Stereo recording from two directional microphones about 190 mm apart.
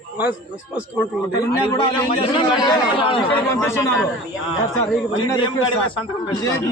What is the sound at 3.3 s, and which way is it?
Speech, 15° left (ahead or behind).